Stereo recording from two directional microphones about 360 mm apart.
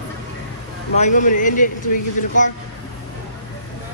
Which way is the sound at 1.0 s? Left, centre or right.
Left.